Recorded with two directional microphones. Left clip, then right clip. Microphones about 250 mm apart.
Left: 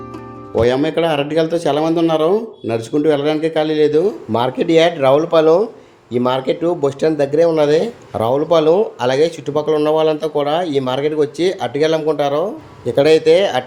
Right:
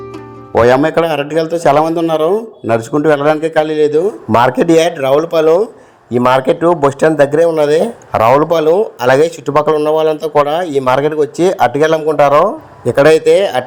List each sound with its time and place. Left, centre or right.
0.5 s speech: right